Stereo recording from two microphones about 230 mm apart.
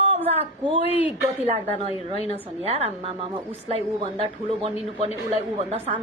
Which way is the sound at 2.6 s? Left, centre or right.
Right.